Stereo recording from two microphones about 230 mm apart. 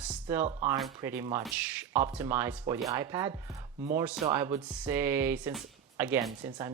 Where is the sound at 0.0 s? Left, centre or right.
Centre.